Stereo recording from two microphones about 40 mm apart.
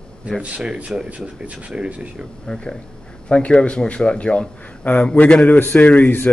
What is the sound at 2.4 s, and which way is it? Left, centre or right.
A man's voice, left.